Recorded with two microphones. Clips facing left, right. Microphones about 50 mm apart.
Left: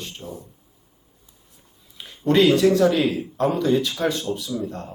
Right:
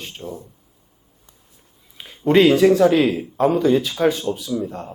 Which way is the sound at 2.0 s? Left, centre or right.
Centre.